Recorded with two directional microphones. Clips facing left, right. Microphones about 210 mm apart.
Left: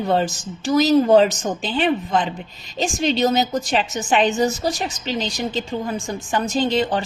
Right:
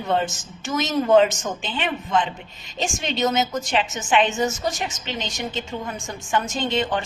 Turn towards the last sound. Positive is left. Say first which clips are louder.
# left 4 dB
turn(degrees=35)  # may be behind; listen again after turning